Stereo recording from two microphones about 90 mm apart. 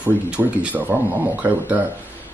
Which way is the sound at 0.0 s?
15° right (ahead or behind).